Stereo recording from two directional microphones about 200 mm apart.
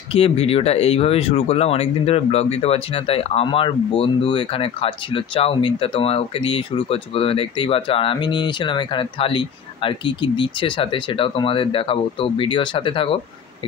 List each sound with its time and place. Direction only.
0.1 s speech: 30° left (ahead or behind)